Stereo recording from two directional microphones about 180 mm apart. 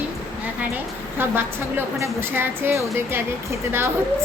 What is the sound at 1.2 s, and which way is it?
A woman's voice, 10° right (ahead or behind).